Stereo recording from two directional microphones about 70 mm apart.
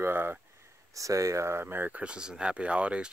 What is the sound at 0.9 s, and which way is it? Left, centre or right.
Speech, right.